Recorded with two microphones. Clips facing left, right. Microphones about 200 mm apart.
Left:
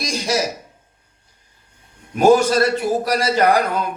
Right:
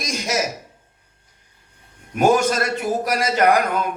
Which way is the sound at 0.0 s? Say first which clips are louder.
Left 2 dB; 35° left (ahead or behind).